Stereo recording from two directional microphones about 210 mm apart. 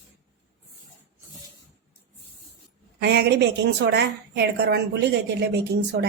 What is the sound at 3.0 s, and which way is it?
Speech, 50° right (ahead or behind).